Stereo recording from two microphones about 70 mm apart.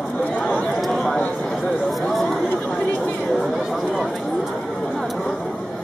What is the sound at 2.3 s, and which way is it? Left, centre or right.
Chatter, left.